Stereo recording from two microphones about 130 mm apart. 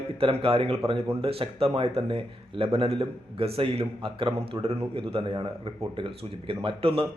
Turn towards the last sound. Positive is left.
turn(degrees=-45)  # may be behind; listen again after turning